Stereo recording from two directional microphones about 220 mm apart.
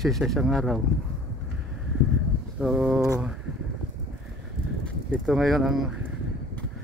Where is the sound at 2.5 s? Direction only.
5° right (ahead or behind).